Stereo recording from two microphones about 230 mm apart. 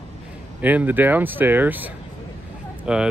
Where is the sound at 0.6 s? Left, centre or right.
Centre.